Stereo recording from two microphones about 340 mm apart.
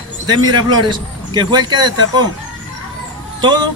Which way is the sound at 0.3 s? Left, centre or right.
Centre.